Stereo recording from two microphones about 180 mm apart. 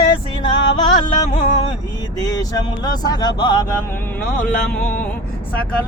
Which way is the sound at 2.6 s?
20° left (ahead or behind).